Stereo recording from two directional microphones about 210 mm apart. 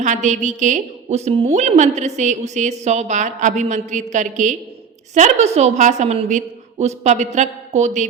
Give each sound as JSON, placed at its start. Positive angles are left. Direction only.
{"t": 0.0, "sound": "a woman's voice", "side_deg": -35}